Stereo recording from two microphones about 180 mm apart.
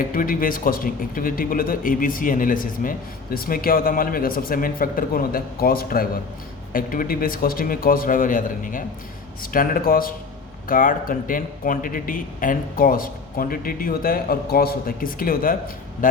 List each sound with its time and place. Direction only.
0.0 s a man's voice: 50° left (ahead or behind)